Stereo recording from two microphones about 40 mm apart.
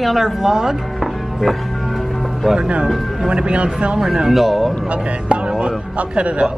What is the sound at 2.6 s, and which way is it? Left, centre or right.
Speech, right.